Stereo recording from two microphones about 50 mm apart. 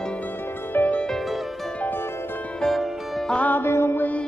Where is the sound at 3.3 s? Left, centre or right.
Left.